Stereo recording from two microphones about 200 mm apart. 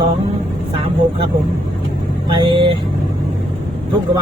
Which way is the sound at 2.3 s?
25° right (ahead or behind).